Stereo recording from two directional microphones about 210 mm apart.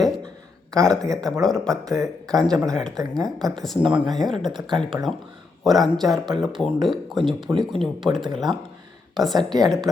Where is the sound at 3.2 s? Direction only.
Centre (ahead or behind).